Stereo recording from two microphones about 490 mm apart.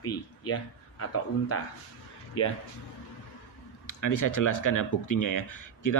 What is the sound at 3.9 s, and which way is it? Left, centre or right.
Speech, left.